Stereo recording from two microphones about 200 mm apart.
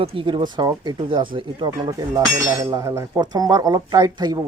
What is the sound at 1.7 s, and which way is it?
Speech, 15° right (ahead or behind).